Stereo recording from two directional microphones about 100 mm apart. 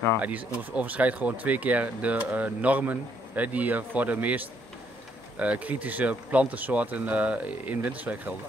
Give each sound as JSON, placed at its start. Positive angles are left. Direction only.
{"t": 0.2, "sound": "speech", "side_deg": -15}